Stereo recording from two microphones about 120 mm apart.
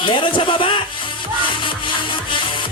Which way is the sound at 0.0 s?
45° left (ahead or behind).